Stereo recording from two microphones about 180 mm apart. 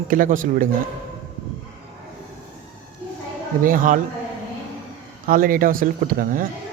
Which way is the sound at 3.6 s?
50° right (ahead or behind).